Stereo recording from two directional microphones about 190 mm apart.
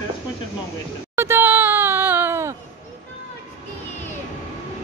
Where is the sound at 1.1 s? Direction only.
10° right (ahead or behind).